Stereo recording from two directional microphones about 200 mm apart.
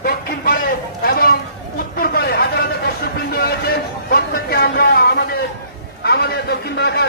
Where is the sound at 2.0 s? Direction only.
50° left (ahead or behind).